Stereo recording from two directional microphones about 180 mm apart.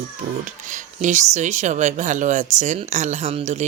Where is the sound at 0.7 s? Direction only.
40° right (ahead or behind).